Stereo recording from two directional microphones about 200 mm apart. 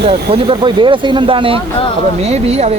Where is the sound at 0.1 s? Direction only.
25° right (ahead or behind).